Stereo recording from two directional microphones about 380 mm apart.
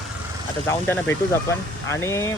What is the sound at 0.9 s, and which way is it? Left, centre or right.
Speech, centre.